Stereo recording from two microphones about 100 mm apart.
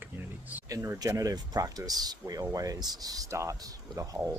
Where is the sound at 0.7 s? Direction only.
30° right (ahead or behind).